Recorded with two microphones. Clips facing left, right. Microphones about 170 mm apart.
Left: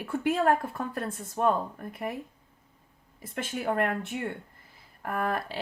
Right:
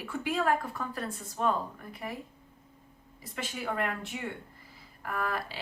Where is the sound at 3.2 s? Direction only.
50° left (ahead or behind).